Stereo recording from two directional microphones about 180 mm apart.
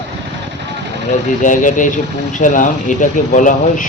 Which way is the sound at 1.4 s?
45° left (ahead or behind).